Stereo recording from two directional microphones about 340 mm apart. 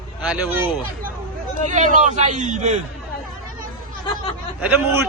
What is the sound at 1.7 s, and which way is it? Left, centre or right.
A man's voice, right.